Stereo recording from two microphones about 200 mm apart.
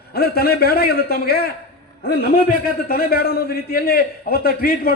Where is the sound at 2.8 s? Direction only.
50° left (ahead or behind).